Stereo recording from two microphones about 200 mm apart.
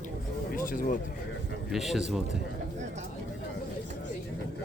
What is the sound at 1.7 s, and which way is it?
Speech, centre (ahead or behind).